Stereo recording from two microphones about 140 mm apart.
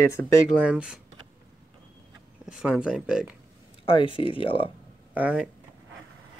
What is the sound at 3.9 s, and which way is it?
Speech, 40° left (ahead or behind).